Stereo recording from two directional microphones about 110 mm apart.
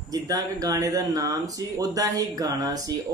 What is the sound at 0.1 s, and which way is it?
Speech, 30° right (ahead or behind).